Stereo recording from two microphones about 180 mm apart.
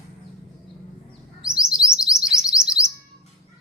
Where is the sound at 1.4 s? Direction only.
5° right (ahead or behind).